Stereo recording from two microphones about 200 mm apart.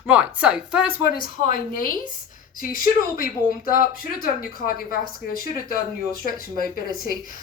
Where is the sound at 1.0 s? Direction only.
45° left (ahead or behind).